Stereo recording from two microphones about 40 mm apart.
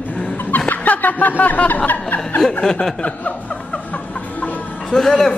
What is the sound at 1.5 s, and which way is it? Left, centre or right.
Chuckle, left.